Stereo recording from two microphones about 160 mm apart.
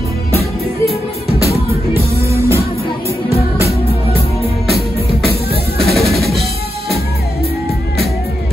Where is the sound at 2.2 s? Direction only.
15° right (ahead or behind).